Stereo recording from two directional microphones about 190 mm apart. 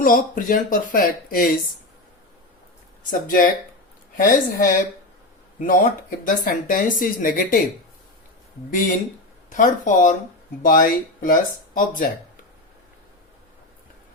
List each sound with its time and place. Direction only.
0.0 s speech: 45° left (ahead or behind)
3.1 s speech: 45° left (ahead or behind)
8.7 s speech: 40° left (ahead or behind)